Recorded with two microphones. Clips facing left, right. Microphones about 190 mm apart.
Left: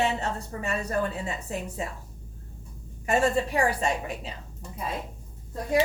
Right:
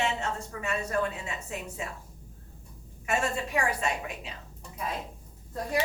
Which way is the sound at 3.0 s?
35° left (ahead or behind).